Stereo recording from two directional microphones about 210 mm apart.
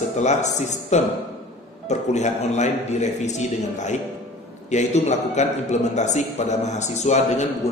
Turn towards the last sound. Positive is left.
turn(degrees=30)  # may be behind; listen again after turning